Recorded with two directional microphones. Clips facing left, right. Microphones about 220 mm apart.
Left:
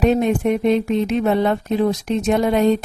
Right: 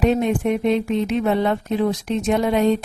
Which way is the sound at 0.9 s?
40° left (ahead or behind).